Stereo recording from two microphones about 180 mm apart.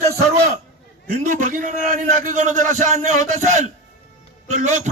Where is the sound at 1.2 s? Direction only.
45° right (ahead or behind).